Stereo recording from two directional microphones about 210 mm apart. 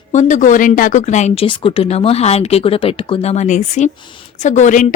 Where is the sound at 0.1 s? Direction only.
35° left (ahead or behind).